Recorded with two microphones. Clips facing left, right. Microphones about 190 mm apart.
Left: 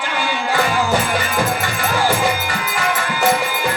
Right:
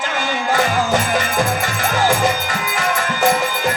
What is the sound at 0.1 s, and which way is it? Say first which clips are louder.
Music: even; 45° right (ahead or behind).